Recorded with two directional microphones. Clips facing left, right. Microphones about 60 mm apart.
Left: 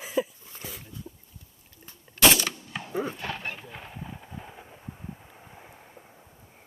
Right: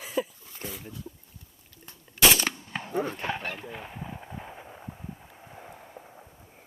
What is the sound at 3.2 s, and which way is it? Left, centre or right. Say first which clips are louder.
Speech: right 3 dB; right.